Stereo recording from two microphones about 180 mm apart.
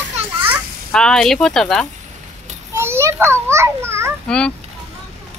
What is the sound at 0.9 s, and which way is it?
Speech, 5° left (ahead or behind).